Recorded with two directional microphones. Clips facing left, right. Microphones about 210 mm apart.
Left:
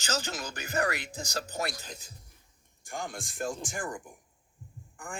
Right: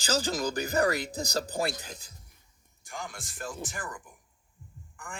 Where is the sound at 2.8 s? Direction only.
50° left (ahead or behind).